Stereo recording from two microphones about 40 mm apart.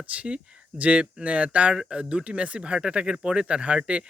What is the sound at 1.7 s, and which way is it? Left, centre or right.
Speech, right.